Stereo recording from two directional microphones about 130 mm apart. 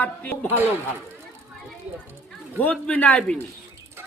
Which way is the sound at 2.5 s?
10° left (ahead or behind).